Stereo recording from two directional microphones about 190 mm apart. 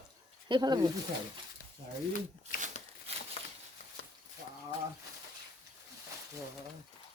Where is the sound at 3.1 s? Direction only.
35° right (ahead or behind).